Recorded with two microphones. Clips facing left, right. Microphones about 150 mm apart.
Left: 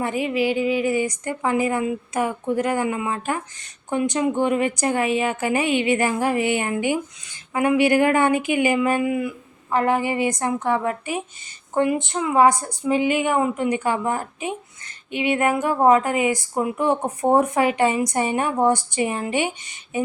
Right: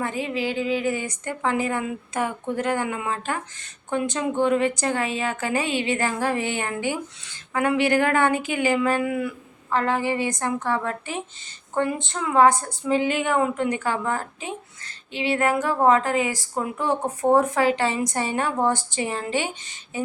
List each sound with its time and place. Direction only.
0.0 s speech: 15° left (ahead or behind)